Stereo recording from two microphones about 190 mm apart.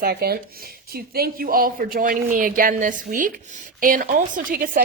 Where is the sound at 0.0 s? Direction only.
55° right (ahead or behind).